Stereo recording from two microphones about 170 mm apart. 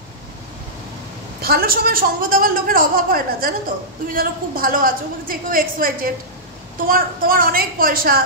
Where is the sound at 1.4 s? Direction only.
60° right (ahead or behind).